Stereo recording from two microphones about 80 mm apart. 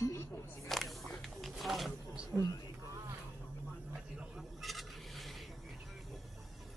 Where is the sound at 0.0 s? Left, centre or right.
Left.